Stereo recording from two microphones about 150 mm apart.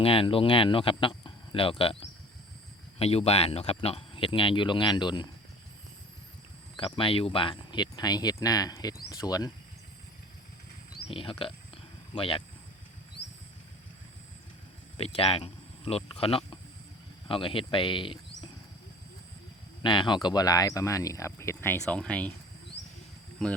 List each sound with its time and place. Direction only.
0.0 s speech: 35° left (ahead or behind)
6.7 s speech: 35° left (ahead or behind)
11.1 s speech: 35° left (ahead or behind)
14.9 s speech: 40° left (ahead or behind)
19.8 s speech: 30° left (ahead or behind); by 22.3 s 5° left (ahead or behind)
23.4 s speech: 5° left (ahead or behind)